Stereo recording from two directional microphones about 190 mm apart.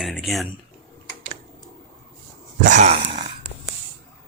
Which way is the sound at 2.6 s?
40° right (ahead or behind).